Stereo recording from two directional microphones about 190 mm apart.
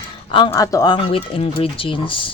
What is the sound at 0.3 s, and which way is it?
Speech, 25° left (ahead or behind).